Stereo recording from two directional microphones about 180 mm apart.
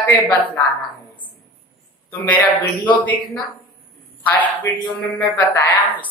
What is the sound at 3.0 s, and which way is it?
A woman's voice, 10° left (ahead or behind).